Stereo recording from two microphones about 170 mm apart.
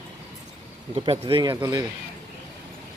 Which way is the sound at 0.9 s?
35° right (ahead or behind).